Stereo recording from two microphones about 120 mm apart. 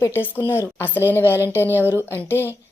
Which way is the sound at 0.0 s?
20° left (ahead or behind).